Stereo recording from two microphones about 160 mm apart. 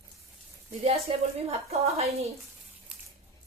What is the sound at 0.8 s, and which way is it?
A woman's voice, 40° right (ahead or behind).